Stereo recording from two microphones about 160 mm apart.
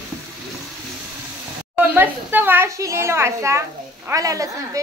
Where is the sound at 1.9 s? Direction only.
10° right (ahead or behind).